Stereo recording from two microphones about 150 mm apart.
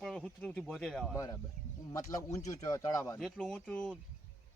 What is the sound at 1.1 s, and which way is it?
Speech, 20° left (ahead or behind).